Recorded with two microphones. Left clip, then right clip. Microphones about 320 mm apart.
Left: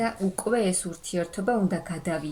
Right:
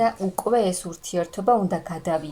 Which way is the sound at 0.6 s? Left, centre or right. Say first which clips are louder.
Right 4 dB; centre.